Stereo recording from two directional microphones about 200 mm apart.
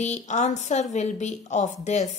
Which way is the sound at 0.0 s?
35° left (ahead or behind).